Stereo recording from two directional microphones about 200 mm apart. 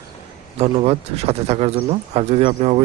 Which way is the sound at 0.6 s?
30° right (ahead or behind).